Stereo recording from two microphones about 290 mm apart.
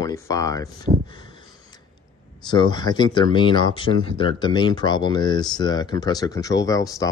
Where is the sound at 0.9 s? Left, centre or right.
Centre.